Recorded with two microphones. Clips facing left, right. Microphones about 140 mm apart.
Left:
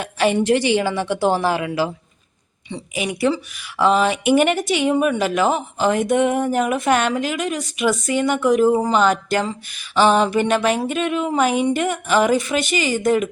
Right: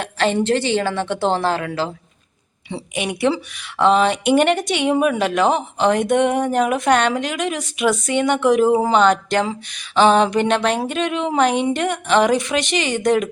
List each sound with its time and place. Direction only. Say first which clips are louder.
0.0 s a woman's voice: left 1 dB; 10° left (ahead or behind)
3.8 s speech: right 1 dB; 5° left (ahead or behind)